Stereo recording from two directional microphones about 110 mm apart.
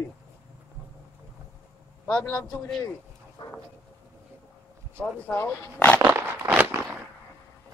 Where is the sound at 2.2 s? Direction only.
30° left (ahead or behind).